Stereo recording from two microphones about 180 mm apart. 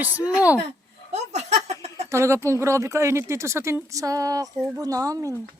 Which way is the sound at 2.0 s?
15° right (ahead or behind).